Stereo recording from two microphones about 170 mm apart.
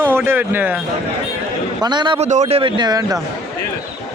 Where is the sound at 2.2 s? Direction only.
40° right (ahead or behind); by 3.2 s 20° right (ahead or behind).